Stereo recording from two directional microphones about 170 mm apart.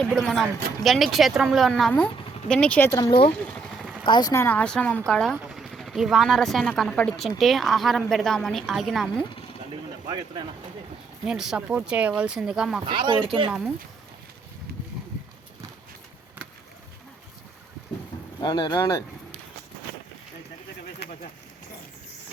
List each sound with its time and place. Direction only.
0.1 s speech: centre (ahead or behind)
2.9 s speech: 25° left (ahead or behind)
3.5 s vehicle: centre (ahead or behind)
4.0 s speech: 25° left (ahead or behind); by 9.2 s centre (ahead or behind)
10.1 s speech: 25° right (ahead or behind)
11.3 s speech: 5° right (ahead or behind)
12.8 s speech: 25° right (ahead or behind)
18.3 s speech: 25° left (ahead or behind)